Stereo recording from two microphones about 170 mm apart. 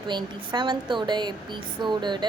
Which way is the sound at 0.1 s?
25° right (ahead or behind).